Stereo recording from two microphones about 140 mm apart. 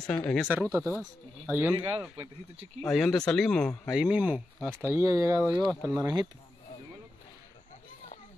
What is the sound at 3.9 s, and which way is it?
Speech, 10° right (ahead or behind).